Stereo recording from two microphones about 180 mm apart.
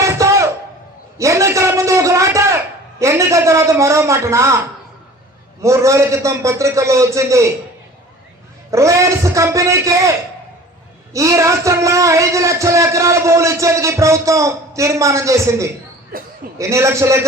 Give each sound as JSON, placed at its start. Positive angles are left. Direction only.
{"t": 0.0, "sound": "a sound", "side_deg": -15}
{"t": 3.0, "sound": "a man's voice", "side_deg": -15}
{"t": 5.6, "sound": "a man's voice", "side_deg": -15}
{"t": 8.7, "sound": "a man's voice", "side_deg": -15}
{"t": 16.1, "sound": "a sound", "side_deg": -50}
{"t": 16.6, "sound": "a man's voice", "side_deg": -15}